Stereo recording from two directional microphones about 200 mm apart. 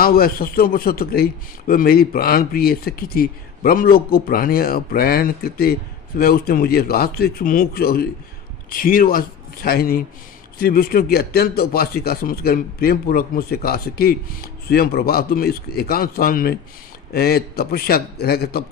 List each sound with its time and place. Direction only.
0.0 s a man's voice: 50° left (ahead or behind)